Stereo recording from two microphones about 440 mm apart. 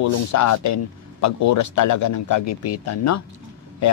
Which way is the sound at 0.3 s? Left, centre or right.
Left.